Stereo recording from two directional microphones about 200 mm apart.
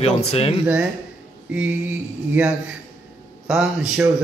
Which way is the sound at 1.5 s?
5° right (ahead or behind).